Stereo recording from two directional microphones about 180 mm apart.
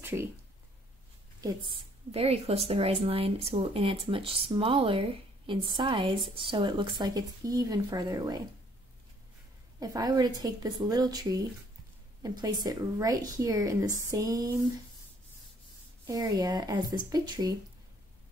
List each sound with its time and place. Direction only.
0.0 s speech: 15° right (ahead or behind)
1.7 s a woman's voice: 35° right (ahead or behind)
9.8 s a woman's voice: 20° right (ahead or behind)
16.1 s a woman's voice: 20° right (ahead or behind)